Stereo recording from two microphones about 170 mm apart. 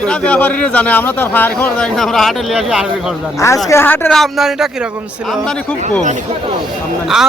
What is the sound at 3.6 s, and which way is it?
A man's voice, 15° left (ahead or behind).